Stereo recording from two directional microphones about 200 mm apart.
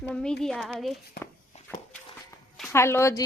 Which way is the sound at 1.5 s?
35° left (ahead or behind).